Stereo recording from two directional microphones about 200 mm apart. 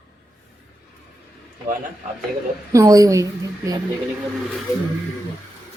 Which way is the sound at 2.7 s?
15° right (ahead or behind).